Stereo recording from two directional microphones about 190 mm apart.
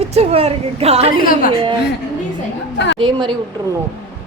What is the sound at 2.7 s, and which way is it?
Speech, 65° left (ahead or behind).